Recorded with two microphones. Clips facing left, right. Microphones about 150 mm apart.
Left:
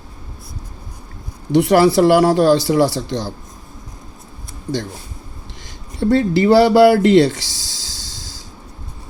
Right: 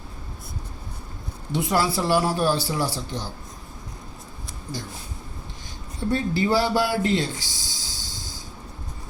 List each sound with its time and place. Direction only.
1.5 s speech: 90° left
6.0 s speech: 90° left